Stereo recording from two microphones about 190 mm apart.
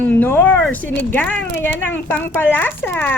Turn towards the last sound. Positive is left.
turn(degrees=10)  # may be behind; listen again after turning